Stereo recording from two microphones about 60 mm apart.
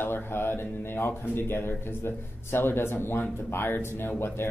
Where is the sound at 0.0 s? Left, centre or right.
Left.